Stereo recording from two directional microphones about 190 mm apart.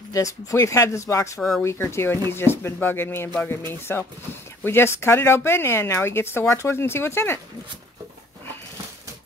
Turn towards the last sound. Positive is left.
turn(degrees=15)  # may be behind; listen again after turning